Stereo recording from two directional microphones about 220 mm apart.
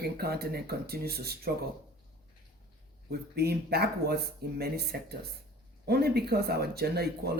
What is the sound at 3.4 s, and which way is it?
Speech, 45° right (ahead or behind).